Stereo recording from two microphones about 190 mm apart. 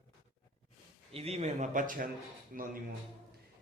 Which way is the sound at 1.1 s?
35° right (ahead or behind).